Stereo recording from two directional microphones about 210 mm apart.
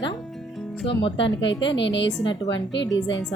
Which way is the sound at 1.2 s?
60° left (ahead or behind).